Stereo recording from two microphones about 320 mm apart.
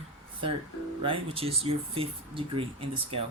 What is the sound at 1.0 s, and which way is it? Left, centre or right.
Speech, centre.